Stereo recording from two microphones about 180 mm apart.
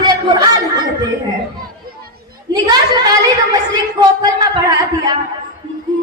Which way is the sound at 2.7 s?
20° right (ahead or behind).